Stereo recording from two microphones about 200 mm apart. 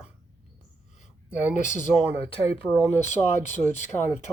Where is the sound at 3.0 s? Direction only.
35° left (ahead or behind).